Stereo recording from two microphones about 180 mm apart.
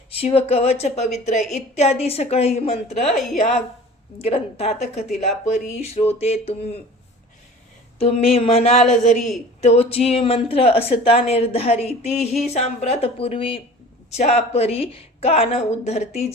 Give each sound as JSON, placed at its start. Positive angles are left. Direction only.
{"t": 0.1, "sound": "speech", "side_deg": 30}
{"t": 7.9, "sound": "speech", "side_deg": 35}